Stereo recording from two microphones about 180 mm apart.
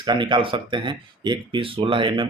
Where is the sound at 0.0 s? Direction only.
25° right (ahead or behind).